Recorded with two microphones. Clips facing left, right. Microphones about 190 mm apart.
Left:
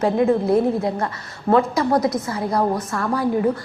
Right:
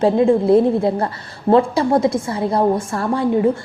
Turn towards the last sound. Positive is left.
turn(degrees=-25)  # may be behind; listen again after turning